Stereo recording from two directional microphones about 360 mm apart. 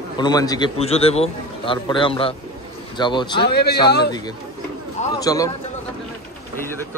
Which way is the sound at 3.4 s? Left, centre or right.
Left.